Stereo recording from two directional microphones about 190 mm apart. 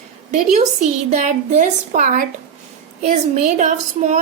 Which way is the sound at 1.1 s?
40° right (ahead or behind).